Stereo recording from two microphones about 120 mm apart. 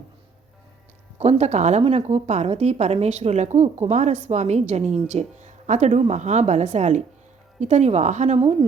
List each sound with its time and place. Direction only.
1.2 s a woman's voice: 65° right (ahead or behind)